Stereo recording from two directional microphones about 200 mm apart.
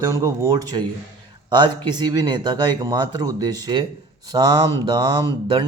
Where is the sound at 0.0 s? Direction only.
15° right (ahead or behind).